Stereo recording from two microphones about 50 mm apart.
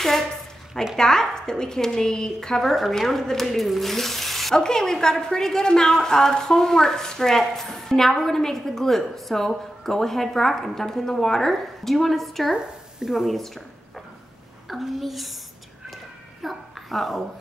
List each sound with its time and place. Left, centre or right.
0.9 s a woman's voice: centre
2.6 s a woman's voice: centre
16.4 s speech: centre